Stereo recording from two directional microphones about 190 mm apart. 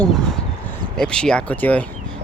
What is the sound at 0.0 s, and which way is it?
Speech, 5° left (ahead or behind).